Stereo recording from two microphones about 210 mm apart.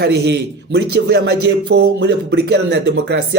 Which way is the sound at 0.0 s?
50° right (ahead or behind).